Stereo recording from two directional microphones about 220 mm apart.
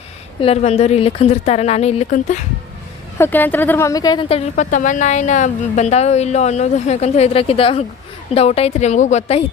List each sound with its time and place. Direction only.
0.4 s a woman's voice: 30° left (ahead or behind)
3.2 s a woman's voice: 10° left (ahead or behind); by 9.4 s 30° left (ahead or behind)